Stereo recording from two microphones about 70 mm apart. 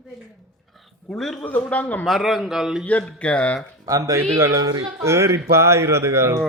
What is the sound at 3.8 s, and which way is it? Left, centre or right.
A man's voice, right.